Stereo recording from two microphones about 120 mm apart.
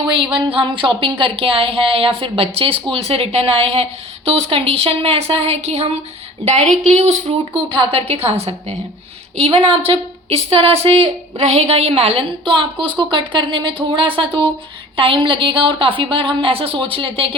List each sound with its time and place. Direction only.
0.1 s a woman's voice: 40° right (ahead or behind); by 7.3 s 65° right (ahead or behind)
7.5 s a woman's voice: 50° right (ahead or behind)
12.5 s speech: 40° right (ahead or behind)